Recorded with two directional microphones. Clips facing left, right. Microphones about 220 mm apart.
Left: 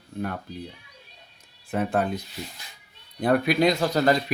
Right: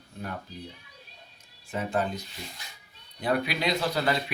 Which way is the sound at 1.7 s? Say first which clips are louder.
Left 4 dB; 60° left (ahead or behind).